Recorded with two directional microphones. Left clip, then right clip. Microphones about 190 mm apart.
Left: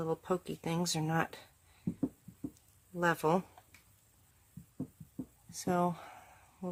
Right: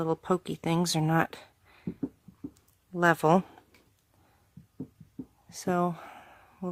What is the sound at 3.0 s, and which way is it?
Speech, 45° right (ahead or behind).